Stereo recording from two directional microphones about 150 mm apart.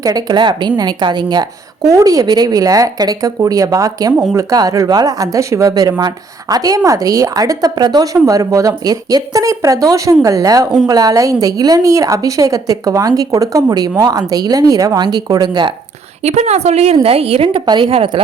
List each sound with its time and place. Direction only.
0.0 s speech: 25° right (ahead or behind)
16.2 s a woman's voice: 45° right (ahead or behind)